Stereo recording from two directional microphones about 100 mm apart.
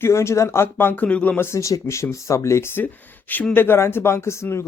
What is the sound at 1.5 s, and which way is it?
Speech, 30° left (ahead or behind).